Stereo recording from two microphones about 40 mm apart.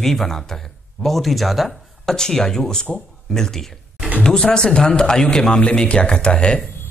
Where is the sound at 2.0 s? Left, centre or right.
Centre.